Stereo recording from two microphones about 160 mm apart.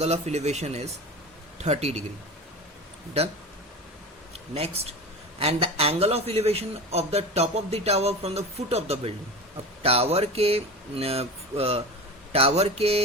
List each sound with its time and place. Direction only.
0.0 s a man's voice: 45° right (ahead or behind)
4.5 s a man's voice: 40° right (ahead or behind)